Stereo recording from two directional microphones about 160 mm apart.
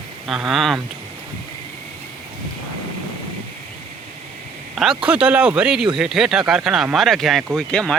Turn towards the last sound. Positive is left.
turn(degrees=5)  # may be behind; listen again after turning